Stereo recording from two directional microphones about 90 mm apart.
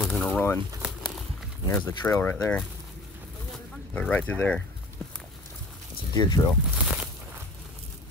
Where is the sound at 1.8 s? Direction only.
35° left (ahead or behind).